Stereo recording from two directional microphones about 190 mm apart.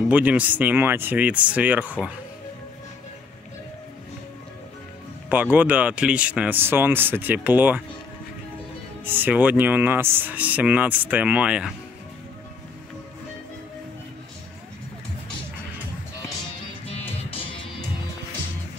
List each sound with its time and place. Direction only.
0.1 s speech: 10° right (ahead or behind)
5.3 s speech: 10° right (ahead or behind)
9.0 s speech: 10° right (ahead or behind)
17.1 s music: 30° left (ahead or behind)